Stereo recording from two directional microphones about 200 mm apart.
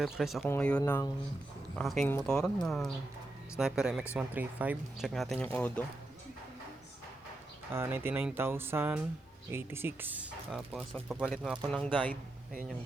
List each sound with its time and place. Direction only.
0.0 s speech: centre (ahead or behind); by 1.1 s 15° left (ahead or behind)
1.7 s speech: centre (ahead or behind)
7.7 s speech: 10° right (ahead or behind); by 12.1 s 5° left (ahead or behind)